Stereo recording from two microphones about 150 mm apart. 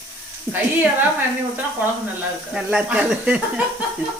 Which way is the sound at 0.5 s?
20° right (ahead or behind).